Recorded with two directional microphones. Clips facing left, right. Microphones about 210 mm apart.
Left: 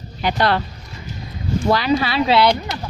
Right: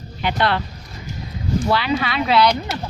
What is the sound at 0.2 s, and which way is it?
Speech, 40° left (ahead or behind).